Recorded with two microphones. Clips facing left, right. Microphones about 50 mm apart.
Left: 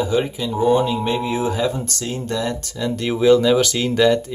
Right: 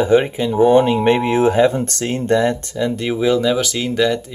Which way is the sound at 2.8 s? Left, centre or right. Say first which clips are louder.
Left 1 dB; centre.